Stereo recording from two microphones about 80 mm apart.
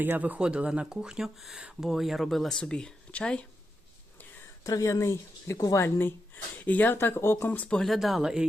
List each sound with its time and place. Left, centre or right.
0.0 s speech: right; by 3.4 s centre
4.6 s speech: left
5.8 s speech: left
7.8 s speech: centre